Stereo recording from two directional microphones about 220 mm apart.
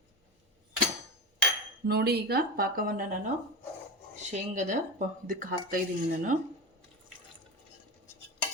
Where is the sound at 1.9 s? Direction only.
45° right (ahead or behind).